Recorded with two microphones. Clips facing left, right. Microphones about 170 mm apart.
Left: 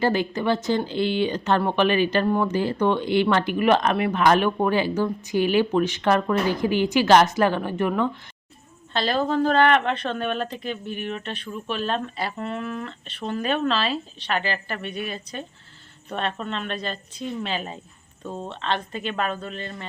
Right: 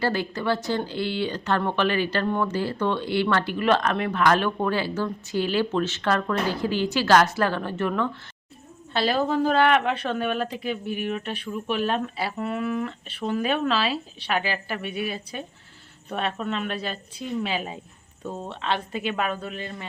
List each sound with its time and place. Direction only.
0.0 s speech: 20° left (ahead or behind)
2.2 s speech: 5° left (ahead or behind)
2.5 s speech: 20° left (ahead or behind)
8.9 s speech: 10° right (ahead or behind)